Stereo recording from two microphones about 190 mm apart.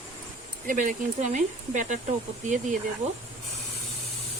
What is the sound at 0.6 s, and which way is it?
Speech, 40° right (ahead or behind).